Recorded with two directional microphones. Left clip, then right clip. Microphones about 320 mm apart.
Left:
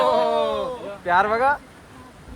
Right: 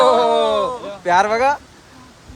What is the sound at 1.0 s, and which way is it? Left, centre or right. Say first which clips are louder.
Speech: right 4 dB; centre.